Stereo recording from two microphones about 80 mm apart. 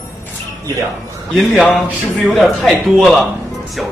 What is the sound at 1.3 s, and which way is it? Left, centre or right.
Speech, centre.